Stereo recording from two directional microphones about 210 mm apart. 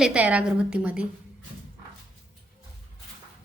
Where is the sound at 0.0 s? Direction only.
5° right (ahead or behind).